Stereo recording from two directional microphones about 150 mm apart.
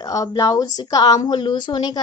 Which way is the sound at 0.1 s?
25° left (ahead or behind).